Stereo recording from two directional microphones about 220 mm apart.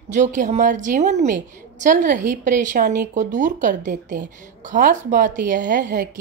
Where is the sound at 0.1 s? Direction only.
35° right (ahead or behind).